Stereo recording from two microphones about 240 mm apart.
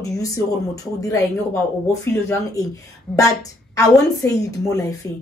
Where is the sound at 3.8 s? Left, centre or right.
Centre.